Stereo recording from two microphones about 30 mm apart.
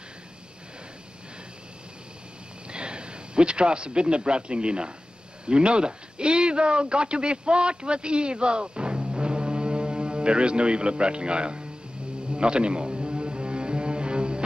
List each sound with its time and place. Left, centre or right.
2.7 s a man's voice: right
12.3 s music: right